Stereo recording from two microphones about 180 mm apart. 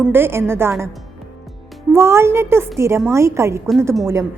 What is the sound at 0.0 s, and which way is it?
Speech, 10° right (ahead or behind).